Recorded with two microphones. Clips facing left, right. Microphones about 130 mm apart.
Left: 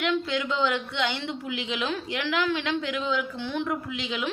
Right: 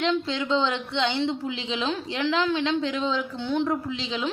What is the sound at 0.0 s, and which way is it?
A woman's voice, 30° right (ahead or behind).